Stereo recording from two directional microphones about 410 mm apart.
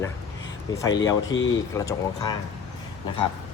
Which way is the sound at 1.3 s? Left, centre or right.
Left.